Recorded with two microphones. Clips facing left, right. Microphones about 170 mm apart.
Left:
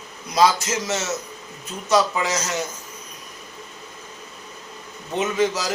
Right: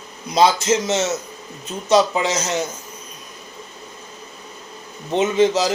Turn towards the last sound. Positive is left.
turn(degrees=-25)  # may be behind; listen again after turning